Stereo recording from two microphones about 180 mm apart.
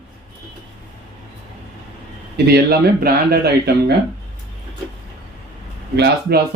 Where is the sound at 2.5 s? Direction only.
60° right (ahead or behind).